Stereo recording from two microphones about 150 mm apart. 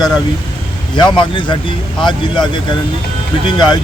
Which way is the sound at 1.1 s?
30° left (ahead or behind).